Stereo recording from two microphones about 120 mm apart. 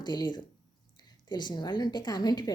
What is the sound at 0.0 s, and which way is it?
Speech, 35° left (ahead or behind).